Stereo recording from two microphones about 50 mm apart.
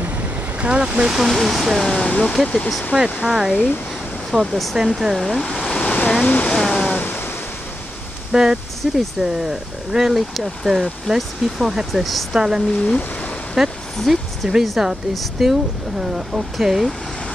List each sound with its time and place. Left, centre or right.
0.6 s speech: right; by 2.1 s centre
2.4 s speech: left
2.9 s speech: centre
4.5 s speech: centre
4.7 s speech: centre
5.3 s speech: centre
5.7 s a sound: left
6.2 s waterfall: left
6.5 s waves: centre
8.3 s speech: centre
12.7 s speech: left
13.6 s speech: centre